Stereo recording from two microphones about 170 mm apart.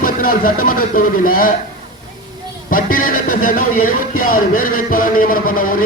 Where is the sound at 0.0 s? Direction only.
55° left (ahead or behind).